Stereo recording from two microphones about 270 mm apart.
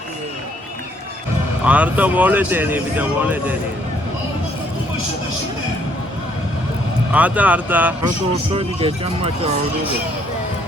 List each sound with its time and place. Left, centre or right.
1.6 s speech: centre
7.1 s speech: centre
8.3 s speech: right